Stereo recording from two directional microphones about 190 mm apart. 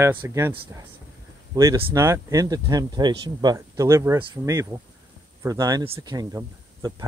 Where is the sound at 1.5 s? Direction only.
15° right (ahead or behind).